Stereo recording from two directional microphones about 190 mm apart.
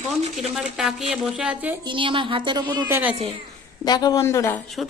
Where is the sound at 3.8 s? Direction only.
20° left (ahead or behind).